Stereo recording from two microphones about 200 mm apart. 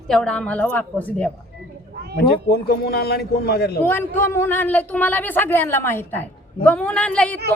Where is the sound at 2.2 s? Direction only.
50° left (ahead or behind).